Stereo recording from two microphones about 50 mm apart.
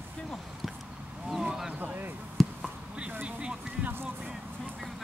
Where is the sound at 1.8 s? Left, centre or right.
Right.